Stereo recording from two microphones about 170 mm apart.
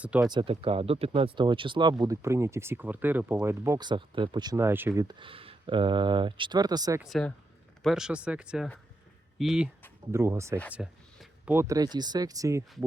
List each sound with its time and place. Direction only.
0.0 s speech: 5° right (ahead or behind)
0.3 s speech: 25° right (ahead or behind)
7.0 s speech: centre (ahead or behind)
10.1 s speech: 15° right (ahead or behind)